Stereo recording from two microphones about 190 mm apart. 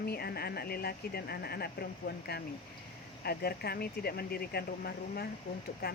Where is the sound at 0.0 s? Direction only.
55° left (ahead or behind).